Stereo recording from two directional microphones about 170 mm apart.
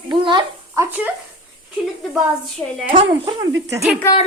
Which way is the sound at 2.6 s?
10° left (ahead or behind).